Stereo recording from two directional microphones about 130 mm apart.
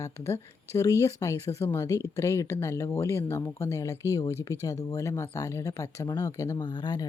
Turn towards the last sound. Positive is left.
turn(degrees=30)  # may be behind; listen again after turning